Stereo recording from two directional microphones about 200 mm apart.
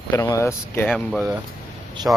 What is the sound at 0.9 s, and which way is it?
Speech, centre (ahead or behind).